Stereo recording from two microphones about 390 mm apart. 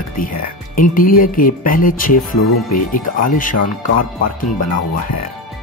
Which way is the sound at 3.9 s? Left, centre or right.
Left.